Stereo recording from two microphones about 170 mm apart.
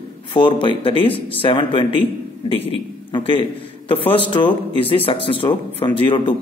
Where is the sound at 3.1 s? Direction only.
30° left (ahead or behind).